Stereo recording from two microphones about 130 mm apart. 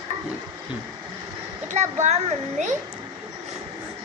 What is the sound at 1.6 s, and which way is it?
A child's voice, 65° right (ahead or behind).